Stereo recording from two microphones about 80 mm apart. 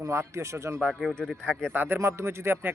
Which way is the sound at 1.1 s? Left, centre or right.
Centre.